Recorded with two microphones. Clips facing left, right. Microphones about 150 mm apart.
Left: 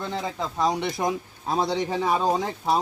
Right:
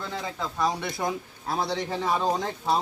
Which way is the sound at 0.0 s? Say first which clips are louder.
Left 3 dB; 20° left (ahead or behind).